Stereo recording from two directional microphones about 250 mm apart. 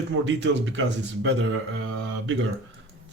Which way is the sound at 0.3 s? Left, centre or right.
Right.